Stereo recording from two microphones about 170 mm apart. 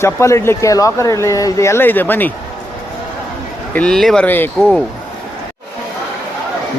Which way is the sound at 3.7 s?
5° left (ahead or behind).